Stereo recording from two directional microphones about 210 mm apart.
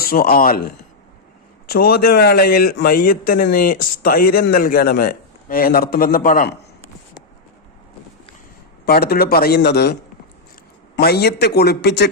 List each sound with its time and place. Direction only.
0.0 s a man's voice: 45° left (ahead or behind)
8.9 s a man's voice: 45° left (ahead or behind)